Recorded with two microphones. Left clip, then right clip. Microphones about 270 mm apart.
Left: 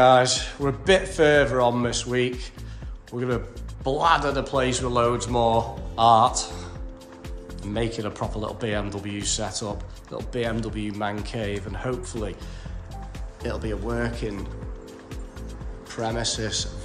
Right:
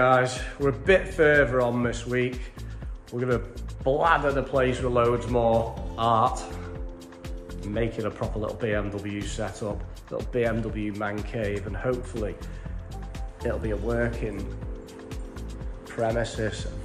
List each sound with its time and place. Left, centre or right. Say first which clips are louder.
0.0 s speech: left 5 dB; centre
7.7 s speech: left 1 dB; centre
13.4 s speech: right 1 dB; centre
15.9 s speech: right 1 dB; centre